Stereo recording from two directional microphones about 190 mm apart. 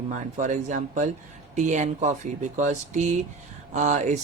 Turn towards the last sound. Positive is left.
turn(degrees=-40)  # may be behind; listen again after turning